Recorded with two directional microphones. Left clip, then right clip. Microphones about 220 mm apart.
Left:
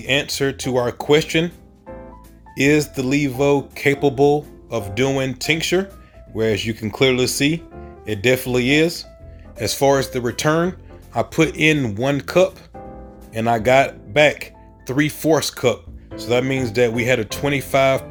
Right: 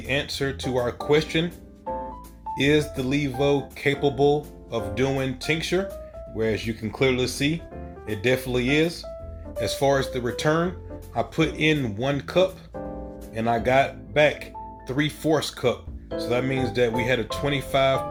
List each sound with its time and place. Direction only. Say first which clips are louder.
0.1 s speech: left 7 dB; 45° left (ahead or behind)
2.6 s speech: left 5 dB; 45° left (ahead or behind)